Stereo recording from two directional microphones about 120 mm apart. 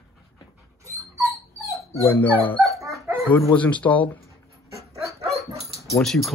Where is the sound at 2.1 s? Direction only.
15° left (ahead or behind).